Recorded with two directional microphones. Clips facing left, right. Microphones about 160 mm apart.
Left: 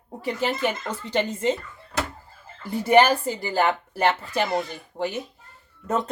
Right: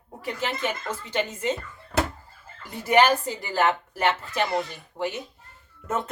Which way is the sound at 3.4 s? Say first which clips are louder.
Left 1 dB; 30° left (ahead or behind).